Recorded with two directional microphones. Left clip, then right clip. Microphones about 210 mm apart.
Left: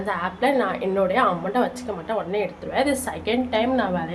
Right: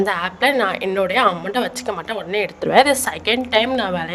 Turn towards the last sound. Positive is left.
turn(degrees=-50)  # may be behind; listen again after turning